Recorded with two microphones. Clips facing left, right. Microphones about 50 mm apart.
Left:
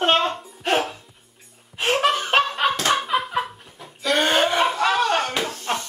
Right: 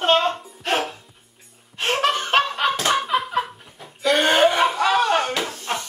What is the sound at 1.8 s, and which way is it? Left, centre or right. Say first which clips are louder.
Laughter: left 1 dB; centre.